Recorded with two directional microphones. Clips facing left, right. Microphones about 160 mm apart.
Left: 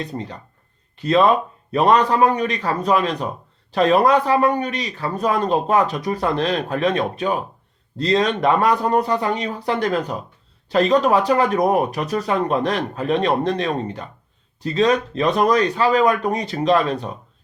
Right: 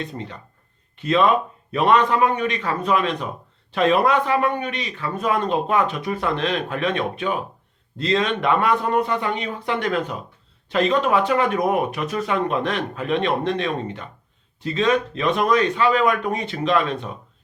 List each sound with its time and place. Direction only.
0.0 s speech: 35° left (ahead or behind)